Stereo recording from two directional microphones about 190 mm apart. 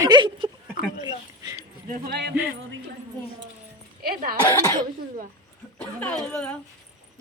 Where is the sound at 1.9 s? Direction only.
55° right (ahead or behind).